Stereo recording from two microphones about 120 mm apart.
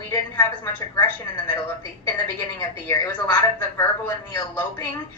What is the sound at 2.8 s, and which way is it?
A woman's voice, 20° left (ahead or behind).